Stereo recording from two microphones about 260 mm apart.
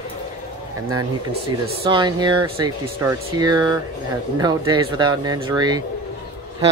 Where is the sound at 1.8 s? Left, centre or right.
Centre.